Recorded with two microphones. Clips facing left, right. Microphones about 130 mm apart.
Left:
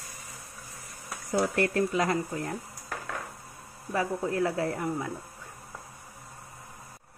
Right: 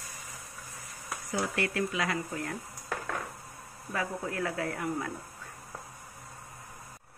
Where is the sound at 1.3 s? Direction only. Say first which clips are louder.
Left 6 dB; 45° left (ahead or behind).